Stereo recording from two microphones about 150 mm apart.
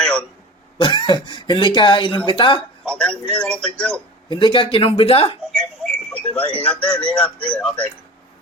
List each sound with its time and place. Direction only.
0.0 s a sound: 5° left (ahead or behind)
0.8 s cough: 35° left (ahead or behind)
1.3 s speech: 30° left (ahead or behind)
2.8 s speech: 5° left (ahead or behind)
4.3 s speech: 35° left (ahead or behind)
5.5 s a sound: 10° left (ahead or behind)
6.7 s speech: 10° left (ahead or behind)